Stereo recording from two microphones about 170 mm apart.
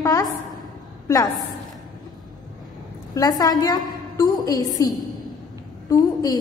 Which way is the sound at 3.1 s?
20° left (ahead or behind).